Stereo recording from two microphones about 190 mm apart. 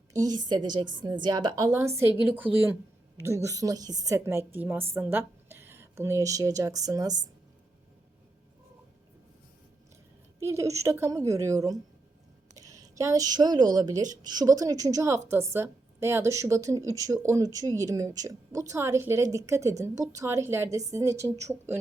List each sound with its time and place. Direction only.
0.1 s a woman's voice: 20° right (ahead or behind)
10.4 s a woman's voice: 15° right (ahead or behind)